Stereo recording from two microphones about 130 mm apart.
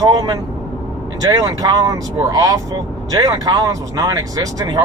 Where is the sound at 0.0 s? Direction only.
30° right (ahead or behind).